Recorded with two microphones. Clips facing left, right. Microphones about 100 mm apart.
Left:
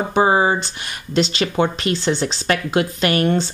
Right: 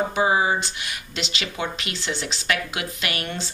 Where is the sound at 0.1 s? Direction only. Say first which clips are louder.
Left 5 dB; 40° left (ahead or behind).